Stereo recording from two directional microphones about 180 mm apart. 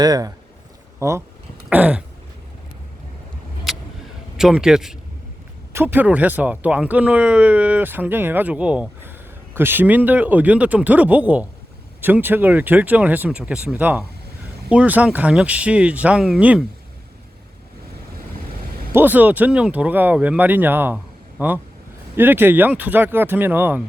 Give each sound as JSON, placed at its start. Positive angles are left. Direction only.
{"t": 0.0, "sound": "speech", "side_deg": -20}
{"t": 3.7, "sound": "vehicle", "side_deg": 0}
{"t": 4.4, "sound": "speech", "side_deg": -5}
{"t": 18.9, "sound": "speech", "side_deg": -10}